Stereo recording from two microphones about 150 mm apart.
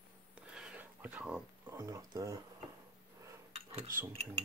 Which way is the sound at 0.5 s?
5° right (ahead or behind).